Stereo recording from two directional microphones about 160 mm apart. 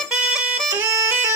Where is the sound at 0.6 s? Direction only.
20° right (ahead or behind).